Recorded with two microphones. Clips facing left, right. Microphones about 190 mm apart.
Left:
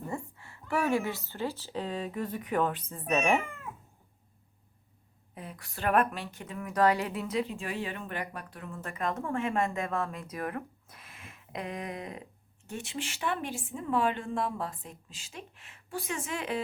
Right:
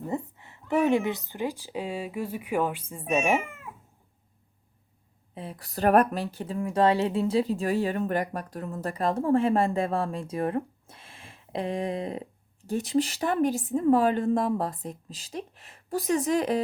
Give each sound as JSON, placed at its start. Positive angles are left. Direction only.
{"t": 0.1, "sound": "speech", "side_deg": -20}
{"t": 3.4, "sound": "cat", "side_deg": 0}
{"t": 5.3, "sound": "speech", "side_deg": -30}